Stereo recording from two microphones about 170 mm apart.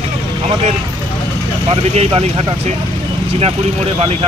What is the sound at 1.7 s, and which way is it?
Speech, 35° right (ahead or behind).